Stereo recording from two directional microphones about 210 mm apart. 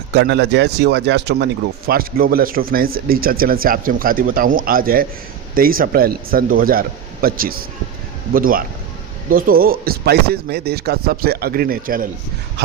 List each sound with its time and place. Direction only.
0.1 s speech: 55° right (ahead or behind)